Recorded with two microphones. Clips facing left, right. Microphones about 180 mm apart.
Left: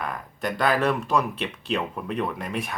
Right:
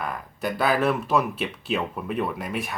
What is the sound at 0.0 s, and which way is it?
Speech, 5° right (ahead or behind).